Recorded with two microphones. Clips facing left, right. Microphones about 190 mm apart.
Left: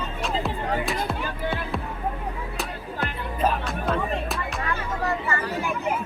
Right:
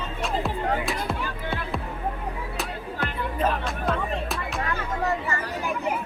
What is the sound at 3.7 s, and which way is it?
Music, centre (ahead or behind).